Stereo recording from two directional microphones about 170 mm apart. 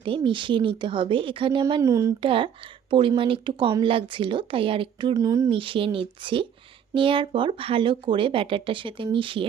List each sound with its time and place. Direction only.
0.0 s speech: 30° right (ahead or behind)
1.8 s speech: 20° right (ahead or behind)
2.2 s speech: 30° right (ahead or behind)